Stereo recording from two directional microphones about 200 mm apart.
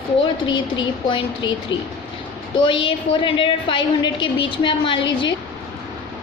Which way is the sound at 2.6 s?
25° left (ahead or behind).